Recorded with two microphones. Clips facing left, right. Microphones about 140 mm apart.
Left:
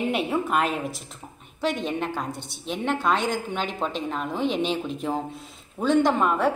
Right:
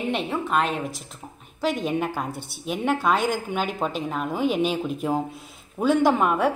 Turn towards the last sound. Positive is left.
turn(degrees=-10)  # may be behind; listen again after turning